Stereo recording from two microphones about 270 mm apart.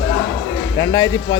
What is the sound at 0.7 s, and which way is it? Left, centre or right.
Speech, centre.